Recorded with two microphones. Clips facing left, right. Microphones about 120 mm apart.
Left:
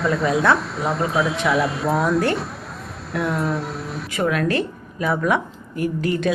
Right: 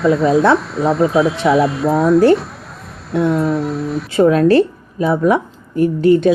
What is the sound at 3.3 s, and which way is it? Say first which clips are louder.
Speech: right 7 dB; centre (ahead or behind).